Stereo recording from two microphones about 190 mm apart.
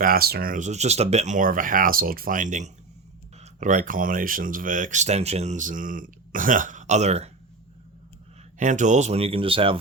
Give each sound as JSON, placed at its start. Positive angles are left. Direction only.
{"t": 0.0, "sound": "speech", "side_deg": -50}
{"t": 8.5, "sound": "speech", "side_deg": -40}